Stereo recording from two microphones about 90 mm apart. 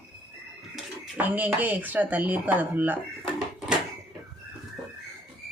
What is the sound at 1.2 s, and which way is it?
Speech, 15° right (ahead or behind).